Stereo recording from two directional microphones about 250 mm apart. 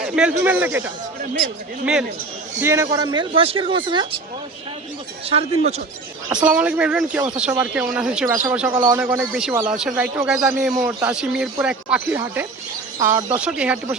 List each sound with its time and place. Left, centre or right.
0.0 s speech: centre
5.3 s speech: right
6.4 s speech: centre